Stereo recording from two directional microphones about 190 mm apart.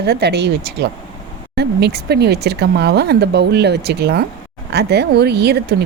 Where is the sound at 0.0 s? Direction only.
60° right (ahead or behind).